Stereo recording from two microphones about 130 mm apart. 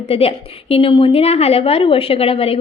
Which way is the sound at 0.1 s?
50° left (ahead or behind).